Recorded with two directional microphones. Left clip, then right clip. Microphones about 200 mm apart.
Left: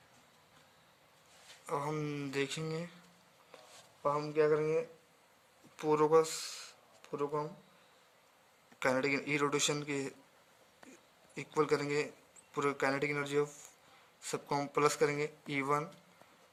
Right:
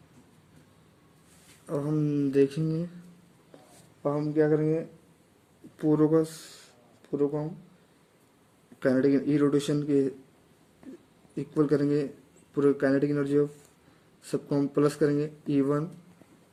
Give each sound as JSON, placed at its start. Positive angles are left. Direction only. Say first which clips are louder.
{"t": 1.7, "sound": "speech", "louder": "right 8 dB", "side_deg": 35}
{"t": 4.0, "sound": "speech", "louder": "right 5 dB", "side_deg": 40}
{"t": 8.8, "sound": "speech", "louder": "right 8 dB", "side_deg": 35}
{"t": 11.3, "sound": "speech", "louder": "right 6 dB", "side_deg": 35}